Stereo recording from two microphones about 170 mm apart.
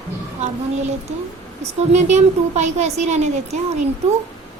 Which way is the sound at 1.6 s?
40° right (ahead or behind).